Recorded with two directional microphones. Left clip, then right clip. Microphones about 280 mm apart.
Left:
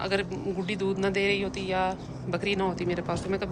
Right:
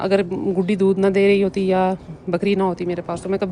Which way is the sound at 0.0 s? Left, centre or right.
Centre.